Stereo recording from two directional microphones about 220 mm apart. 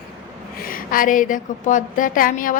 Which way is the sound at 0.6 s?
40° left (ahead or behind).